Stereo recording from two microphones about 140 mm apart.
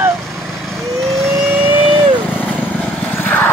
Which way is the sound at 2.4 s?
10° left (ahead or behind).